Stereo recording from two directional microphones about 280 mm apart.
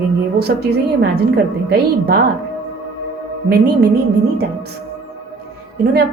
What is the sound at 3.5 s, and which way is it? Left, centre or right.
Speech, right.